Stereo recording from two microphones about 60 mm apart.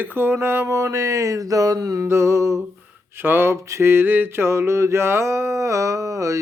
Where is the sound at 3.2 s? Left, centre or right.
Right.